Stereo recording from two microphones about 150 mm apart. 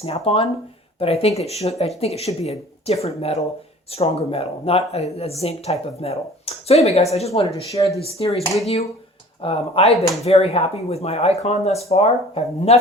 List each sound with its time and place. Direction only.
0.0 s speech: 40° left (ahead or behind)
7.8 s speech: 35° left (ahead or behind)